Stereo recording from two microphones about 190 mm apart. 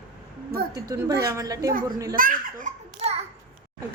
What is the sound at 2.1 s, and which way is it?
Speech, 45° right (ahead or behind).